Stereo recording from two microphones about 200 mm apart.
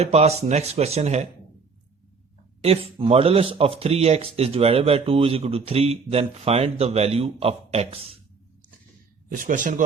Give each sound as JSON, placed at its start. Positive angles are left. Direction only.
{"t": 0.0, "sound": "speech", "side_deg": -30}
{"t": 2.6, "sound": "speech", "side_deg": -30}
{"t": 9.3, "sound": "speech", "side_deg": -40}